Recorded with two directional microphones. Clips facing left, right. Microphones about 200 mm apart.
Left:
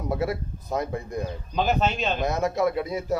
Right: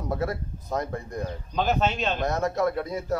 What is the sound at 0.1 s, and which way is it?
Speech, 10° left (ahead or behind).